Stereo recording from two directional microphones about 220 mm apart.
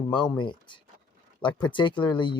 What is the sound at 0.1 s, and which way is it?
Speech, 20° left (ahead or behind).